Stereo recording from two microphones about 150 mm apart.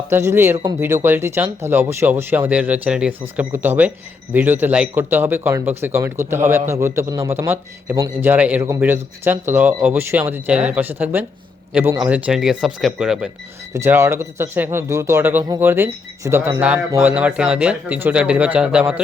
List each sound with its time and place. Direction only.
0.1 s a man's voice: 15° right (ahead or behind)
13.7 s a man's voice: 15° right (ahead or behind)